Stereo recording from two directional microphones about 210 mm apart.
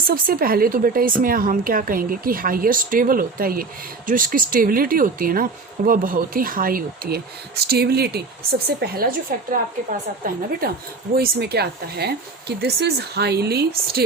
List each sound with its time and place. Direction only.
0.1 s a woman's voice: 45° right (ahead or behind)
10.6 s a woman's voice: 45° right (ahead or behind)